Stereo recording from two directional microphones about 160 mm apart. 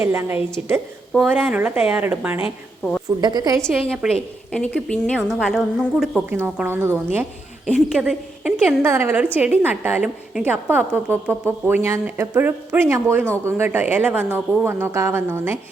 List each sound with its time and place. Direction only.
0.0 s a woman's voice: 15° right (ahead or behind)
3.2 s a woman's voice: 25° right (ahead or behind)
3.6 s a woman's voice: centre (ahead or behind)
6.3 s a woman's voice: 15° right (ahead or behind)
8.8 s a woman's voice: 15° right (ahead or behind)